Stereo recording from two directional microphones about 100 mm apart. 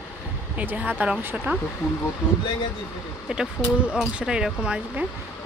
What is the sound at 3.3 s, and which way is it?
Speech, 10° right (ahead or behind).